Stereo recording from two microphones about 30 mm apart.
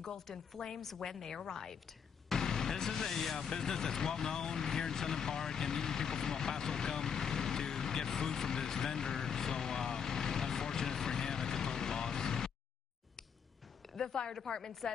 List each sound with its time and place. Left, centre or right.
0.0 s a woman's voice: centre
13.9 s a woman's voice: left